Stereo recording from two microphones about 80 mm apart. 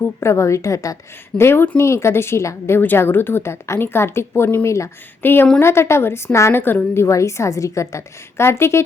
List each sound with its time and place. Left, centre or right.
0.2 s a woman's voice: left
1.4 s a woman's voice: left
5.2 s a woman's voice: left